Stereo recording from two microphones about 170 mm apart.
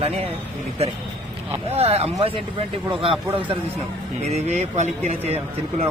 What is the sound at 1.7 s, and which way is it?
Speech, 35° right (ahead or behind).